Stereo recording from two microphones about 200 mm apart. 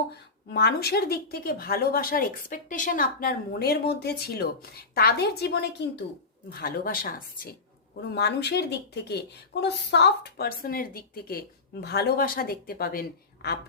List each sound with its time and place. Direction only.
0.5 s a woman's voice: 50° left (ahead or behind)